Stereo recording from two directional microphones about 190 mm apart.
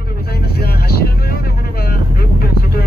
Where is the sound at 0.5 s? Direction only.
55° left (ahead or behind).